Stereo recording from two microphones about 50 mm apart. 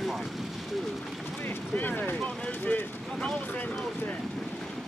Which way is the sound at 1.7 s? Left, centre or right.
Left.